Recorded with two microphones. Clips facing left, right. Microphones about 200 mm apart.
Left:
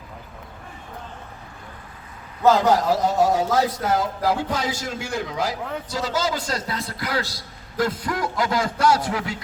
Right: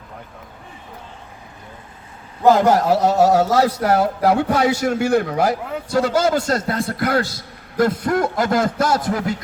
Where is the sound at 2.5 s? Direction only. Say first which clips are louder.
Right 4 dB; 60° right (ahead or behind).